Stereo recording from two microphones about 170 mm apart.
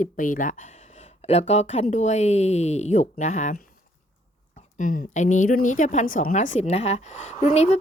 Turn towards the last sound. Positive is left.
turn(degrees=40)  # may be behind; listen again after turning